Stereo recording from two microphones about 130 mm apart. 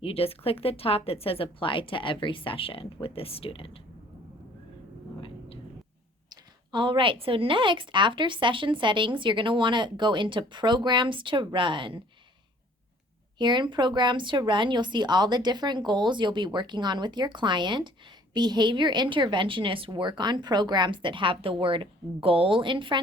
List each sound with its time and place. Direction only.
0.0 s a woman's voice: 50° left (ahead or behind)
6.3 s speech: 35° right (ahead or behind)
13.4 s speech: 35° right (ahead or behind)